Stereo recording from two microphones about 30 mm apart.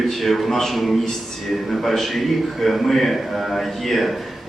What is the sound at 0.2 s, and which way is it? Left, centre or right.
A man's voice, centre.